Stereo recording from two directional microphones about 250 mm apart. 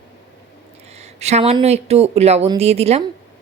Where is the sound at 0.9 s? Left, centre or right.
Right.